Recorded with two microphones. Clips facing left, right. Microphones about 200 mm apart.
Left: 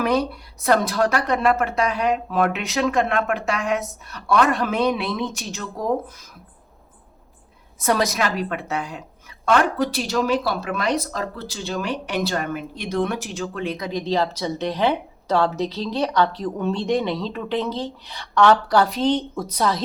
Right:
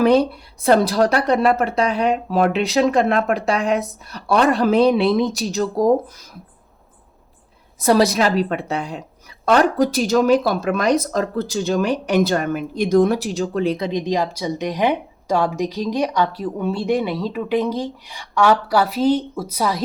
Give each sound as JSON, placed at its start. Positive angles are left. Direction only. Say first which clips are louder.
{"t": 0.0, "sound": "speech", "louder": "right 6 dB", "side_deg": -30}
{"t": 7.8, "sound": "speech", "louder": "right 6 dB", "side_deg": -35}
{"t": 14.0, "sound": "a woman's voice", "louder": "right 1 dB", "side_deg": -15}